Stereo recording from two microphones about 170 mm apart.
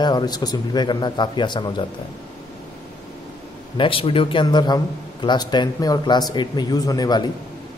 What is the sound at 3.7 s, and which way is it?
A man's voice, 30° left (ahead or behind).